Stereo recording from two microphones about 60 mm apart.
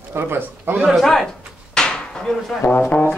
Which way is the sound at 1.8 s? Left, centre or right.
Centre.